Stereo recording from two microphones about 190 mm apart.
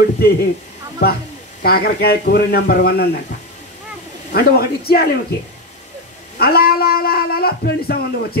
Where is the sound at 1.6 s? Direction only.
55° left (ahead or behind).